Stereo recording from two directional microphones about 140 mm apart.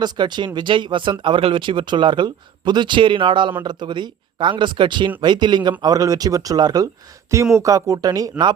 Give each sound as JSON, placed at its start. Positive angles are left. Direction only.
{"t": 0.0, "sound": "speech", "side_deg": -30}